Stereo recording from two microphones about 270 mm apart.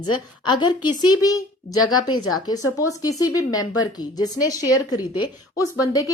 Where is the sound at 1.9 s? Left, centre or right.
Left.